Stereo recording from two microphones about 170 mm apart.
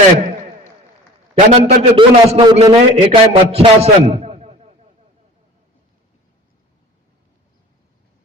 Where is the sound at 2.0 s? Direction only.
35° right (ahead or behind).